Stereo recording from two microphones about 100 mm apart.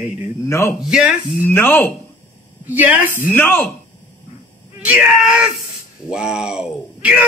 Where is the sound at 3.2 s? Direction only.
20° left (ahead or behind).